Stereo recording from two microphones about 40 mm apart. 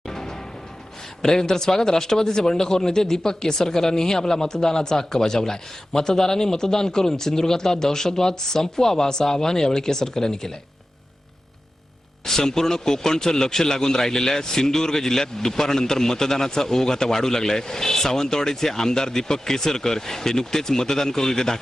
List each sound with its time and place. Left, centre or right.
0.1 s music: centre
1.2 s a man's voice: centre
12.2 s a man's voice: centre